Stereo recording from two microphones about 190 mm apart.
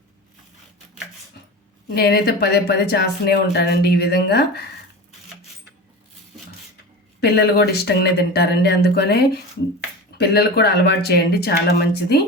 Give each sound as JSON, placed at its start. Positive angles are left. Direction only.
{"t": 1.9, "sound": "speech", "side_deg": 55}
{"t": 7.2, "sound": "speech", "side_deg": 60}